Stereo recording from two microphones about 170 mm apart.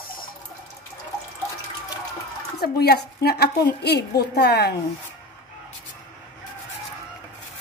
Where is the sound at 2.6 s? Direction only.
70° left (ahead or behind).